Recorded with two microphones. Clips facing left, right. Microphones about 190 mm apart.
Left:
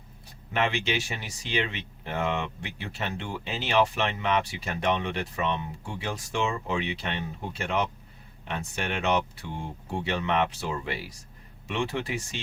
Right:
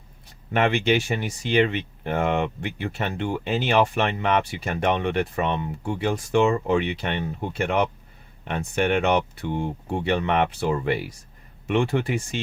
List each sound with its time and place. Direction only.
0.5 s speech: 55° right (ahead or behind)